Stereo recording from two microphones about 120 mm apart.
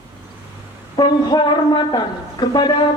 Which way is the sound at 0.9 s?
35° left (ahead or behind).